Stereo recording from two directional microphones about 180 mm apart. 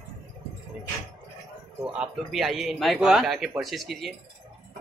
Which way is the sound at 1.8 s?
5° right (ahead or behind).